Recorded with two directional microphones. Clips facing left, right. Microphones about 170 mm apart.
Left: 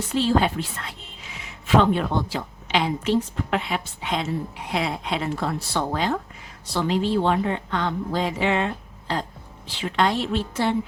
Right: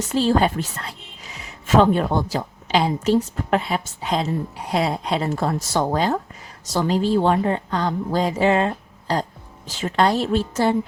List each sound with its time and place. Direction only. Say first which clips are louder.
0.0 s a woman's voice: right 3 dB; 45° right (ahead or behind)